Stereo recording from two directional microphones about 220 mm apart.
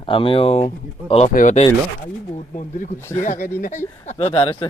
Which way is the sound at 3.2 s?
35° left (ahead or behind).